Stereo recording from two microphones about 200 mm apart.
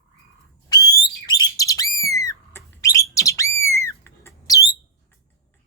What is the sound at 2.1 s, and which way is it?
Bird, 15° left (ahead or behind).